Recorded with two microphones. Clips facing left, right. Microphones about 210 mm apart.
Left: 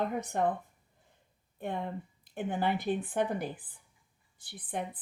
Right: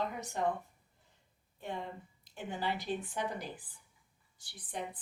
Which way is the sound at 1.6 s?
55° left (ahead or behind).